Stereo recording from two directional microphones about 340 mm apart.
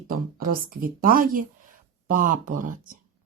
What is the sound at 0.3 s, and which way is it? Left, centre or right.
Speech, right.